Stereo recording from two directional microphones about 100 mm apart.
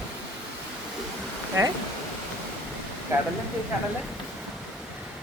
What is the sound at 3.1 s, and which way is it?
Speech, 30° right (ahead or behind).